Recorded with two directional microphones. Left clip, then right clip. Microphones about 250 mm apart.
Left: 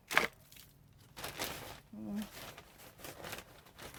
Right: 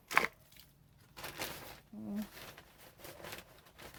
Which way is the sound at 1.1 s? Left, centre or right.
Centre.